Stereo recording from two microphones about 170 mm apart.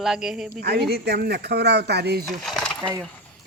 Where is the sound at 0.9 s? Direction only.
70° right (ahead or behind).